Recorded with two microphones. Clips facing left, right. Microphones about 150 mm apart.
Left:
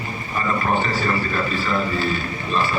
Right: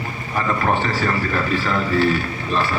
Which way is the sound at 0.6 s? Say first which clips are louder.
Right 2 dB; 65° right (ahead or behind).